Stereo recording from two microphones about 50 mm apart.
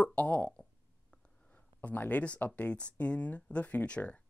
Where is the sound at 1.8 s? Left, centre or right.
Left.